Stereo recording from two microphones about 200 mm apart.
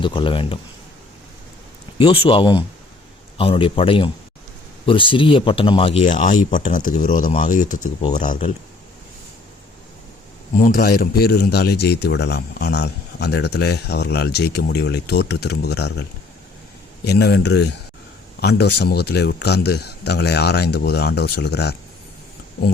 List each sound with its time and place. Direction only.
0.0 s speech: 25° left (ahead or behind)
2.0 s speech: 30° left (ahead or behind)
10.5 s a man's voice: 40° left (ahead or behind); by 21.8 s 60° left (ahead or behind)